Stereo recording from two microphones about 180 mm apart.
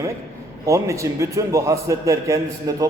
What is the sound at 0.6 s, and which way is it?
A man's voice, 15° right (ahead or behind).